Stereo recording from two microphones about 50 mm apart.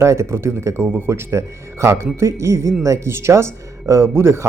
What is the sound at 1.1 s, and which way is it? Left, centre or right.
Speech, right.